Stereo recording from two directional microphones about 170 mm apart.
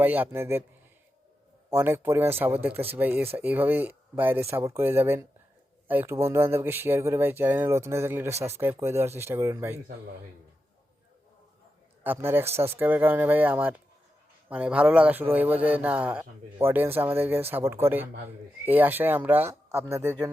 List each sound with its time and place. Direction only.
0.0 s speech: 10° right (ahead or behind)
1.7 s speech: 15° right (ahead or behind)
12.0 s speech: 15° right (ahead or behind)